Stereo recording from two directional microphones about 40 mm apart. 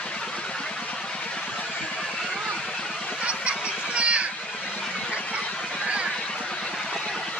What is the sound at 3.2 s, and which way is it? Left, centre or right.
Fowl, right.